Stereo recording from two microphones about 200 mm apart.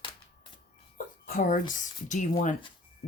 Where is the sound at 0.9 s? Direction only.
40° left (ahead or behind).